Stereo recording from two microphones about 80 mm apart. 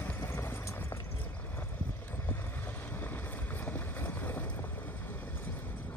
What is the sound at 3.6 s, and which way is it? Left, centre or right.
Boat, left.